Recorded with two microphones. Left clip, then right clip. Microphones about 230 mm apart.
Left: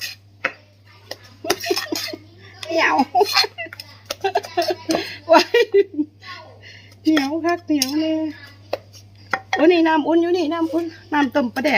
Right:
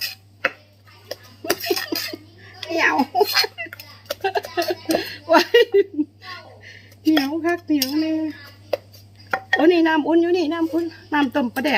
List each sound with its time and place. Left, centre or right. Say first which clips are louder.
1.0 s a sound: left 1 dB; centre
7.9 s speech: left 1 dB; centre
9.6 s speech: left 2 dB; centre